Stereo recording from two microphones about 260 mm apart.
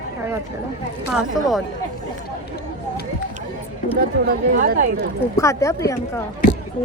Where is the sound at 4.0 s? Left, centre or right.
Right.